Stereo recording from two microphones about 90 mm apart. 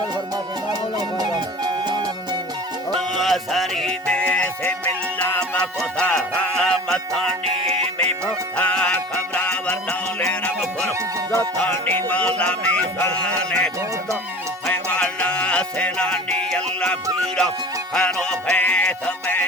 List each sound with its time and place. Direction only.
1.2 s music: 50° right (ahead or behind)
2.9 s music: centre (ahead or behind)
4.0 s music: 15° left (ahead or behind)
8.5 s music: 15° left (ahead or behind)
14.7 s music: 15° left (ahead or behind)